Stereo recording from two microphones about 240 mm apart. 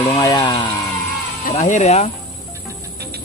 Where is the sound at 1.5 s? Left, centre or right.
Left.